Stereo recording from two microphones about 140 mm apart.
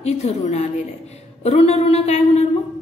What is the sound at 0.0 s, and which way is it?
A woman's voice, 55° left (ahead or behind).